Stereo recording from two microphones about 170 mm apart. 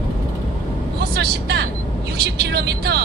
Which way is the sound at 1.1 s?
70° right (ahead or behind).